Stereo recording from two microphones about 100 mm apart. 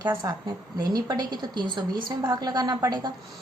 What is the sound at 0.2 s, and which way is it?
A woman's voice, 45° right (ahead or behind).